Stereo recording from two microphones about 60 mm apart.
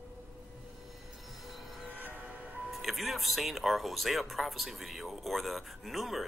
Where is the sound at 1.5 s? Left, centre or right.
Centre.